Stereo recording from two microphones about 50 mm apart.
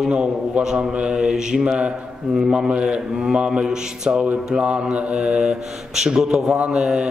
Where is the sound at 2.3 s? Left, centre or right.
Centre.